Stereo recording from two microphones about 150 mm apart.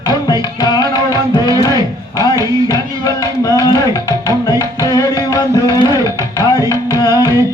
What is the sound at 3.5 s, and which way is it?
Music, 25° left (ahead or behind).